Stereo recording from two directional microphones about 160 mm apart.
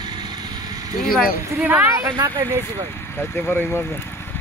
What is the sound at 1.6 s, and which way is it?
Speech, 10° right (ahead or behind).